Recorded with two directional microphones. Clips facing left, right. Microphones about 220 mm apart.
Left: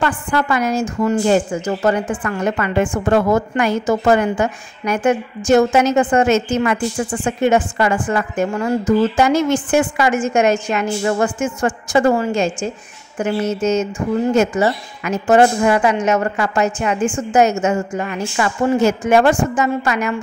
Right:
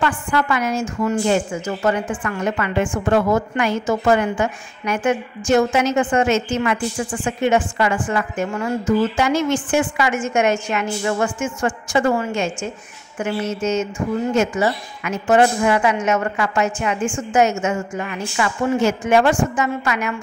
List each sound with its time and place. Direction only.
0.0 s a woman's voice: 35° left (ahead or behind)